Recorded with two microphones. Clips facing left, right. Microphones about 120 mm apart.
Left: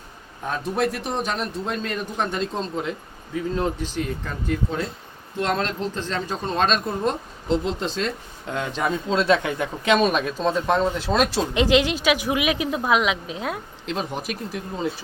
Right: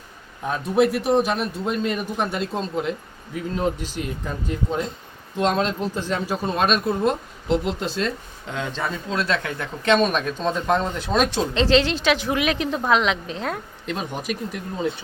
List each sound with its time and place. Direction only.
0.4 s a man's voice: 5° right (ahead or behind)
8.5 s a woman's voice: 10° left (ahead or behind)
11.5 s a woman's voice: 15° left (ahead or behind)